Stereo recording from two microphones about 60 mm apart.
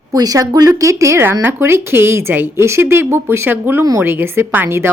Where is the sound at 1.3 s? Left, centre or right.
Right.